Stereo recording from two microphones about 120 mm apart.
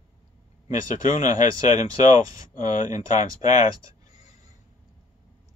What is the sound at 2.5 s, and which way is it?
Speech, 90° left.